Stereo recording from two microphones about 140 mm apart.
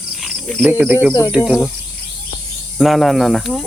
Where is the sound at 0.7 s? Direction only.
10° right (ahead or behind).